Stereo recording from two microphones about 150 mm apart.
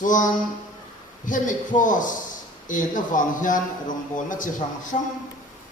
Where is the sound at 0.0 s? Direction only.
60° left (ahead or behind).